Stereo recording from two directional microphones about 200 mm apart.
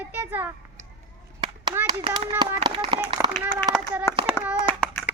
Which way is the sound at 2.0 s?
30° right (ahead or behind).